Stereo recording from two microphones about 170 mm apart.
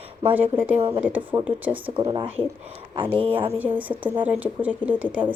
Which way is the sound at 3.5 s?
10° right (ahead or behind).